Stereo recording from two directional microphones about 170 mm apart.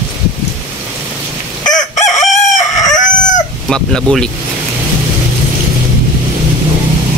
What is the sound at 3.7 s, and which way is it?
Speech, 5° left (ahead or behind).